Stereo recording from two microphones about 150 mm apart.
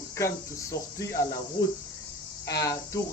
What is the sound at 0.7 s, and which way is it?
Speech, 20° left (ahead or behind).